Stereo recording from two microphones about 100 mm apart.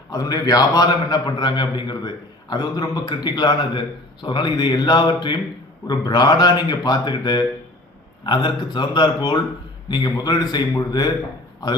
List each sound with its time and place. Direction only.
0.1 s a man's voice: 40° left (ahead or behind)